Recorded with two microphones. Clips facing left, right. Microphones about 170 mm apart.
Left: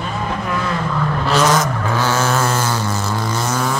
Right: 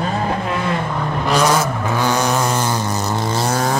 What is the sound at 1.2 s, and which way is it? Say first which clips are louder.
Vehicle: even; 10° right (ahead or behind).